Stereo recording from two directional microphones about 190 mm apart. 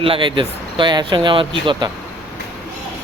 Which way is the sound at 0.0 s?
25° right (ahead or behind).